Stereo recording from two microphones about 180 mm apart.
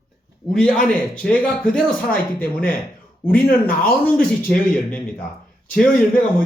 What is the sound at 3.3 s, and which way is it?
Speech, 55° left (ahead or behind).